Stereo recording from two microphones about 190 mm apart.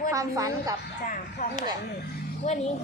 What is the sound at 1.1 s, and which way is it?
Speech, 40° left (ahead or behind).